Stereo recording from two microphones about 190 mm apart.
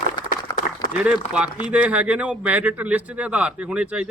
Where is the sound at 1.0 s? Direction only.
5° right (ahead or behind).